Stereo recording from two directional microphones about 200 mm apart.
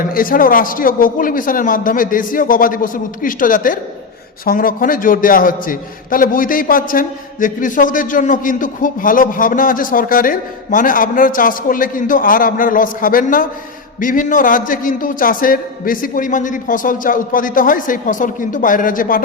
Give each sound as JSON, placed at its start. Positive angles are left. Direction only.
{"t": 0.1, "sound": "a man's voice", "side_deg": 45}